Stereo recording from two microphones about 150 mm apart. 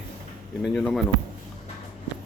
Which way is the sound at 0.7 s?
5° left (ahead or behind).